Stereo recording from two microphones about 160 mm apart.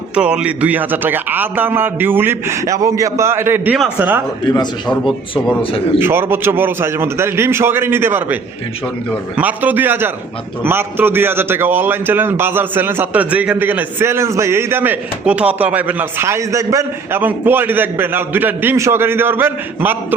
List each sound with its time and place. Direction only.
0.1 s a man's voice: 5° right (ahead or behind)
4.4 s a man's voice: 25° left (ahead or behind)
6.0 s a man's voice: 15° right (ahead or behind)